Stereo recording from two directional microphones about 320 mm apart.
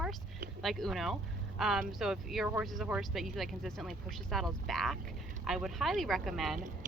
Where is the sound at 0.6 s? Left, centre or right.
Centre.